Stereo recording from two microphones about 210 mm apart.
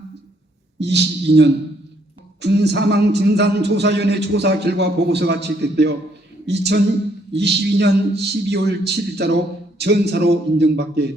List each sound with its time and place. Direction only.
0.8 s a man's voice: 55° right (ahead or behind)